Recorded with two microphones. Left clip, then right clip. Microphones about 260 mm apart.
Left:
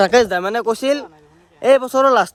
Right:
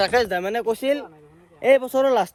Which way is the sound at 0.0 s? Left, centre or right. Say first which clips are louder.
Left 7 dB; left.